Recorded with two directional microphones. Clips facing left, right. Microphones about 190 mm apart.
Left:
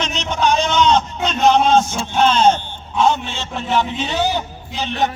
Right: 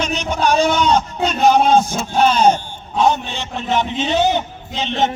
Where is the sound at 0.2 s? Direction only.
10° right (ahead or behind).